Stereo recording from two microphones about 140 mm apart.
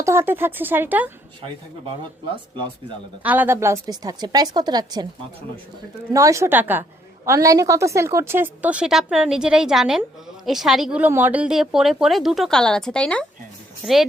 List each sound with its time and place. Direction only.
0.0 s a woman's voice: 20° right (ahead or behind)
3.2 s a woman's voice: 15° right (ahead or behind); by 5.0 s 30° right (ahead or behind)
6.1 s a woman's voice: 20° right (ahead or behind); by 13.2 s 5° left (ahead or behind)